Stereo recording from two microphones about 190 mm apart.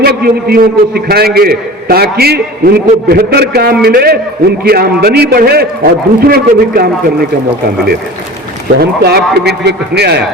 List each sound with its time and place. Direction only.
0.0 s a man's voice: 55° right (ahead or behind)
8.8 s a man's voice: 55° right (ahead or behind)